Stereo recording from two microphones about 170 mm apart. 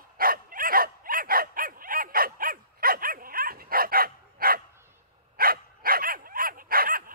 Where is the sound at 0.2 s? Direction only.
55° right (ahead or behind).